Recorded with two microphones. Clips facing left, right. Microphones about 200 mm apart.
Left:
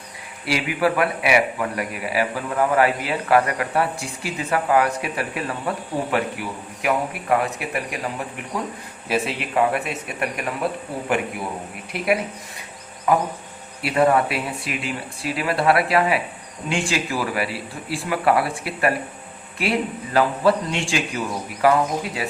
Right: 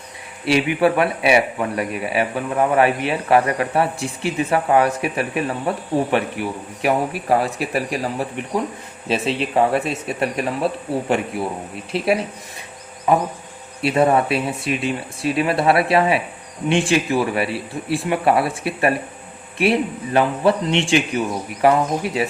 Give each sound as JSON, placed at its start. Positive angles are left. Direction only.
{"t": 0.4, "sound": "speech", "side_deg": -25}
{"t": 11.9, "sound": "speech", "side_deg": -30}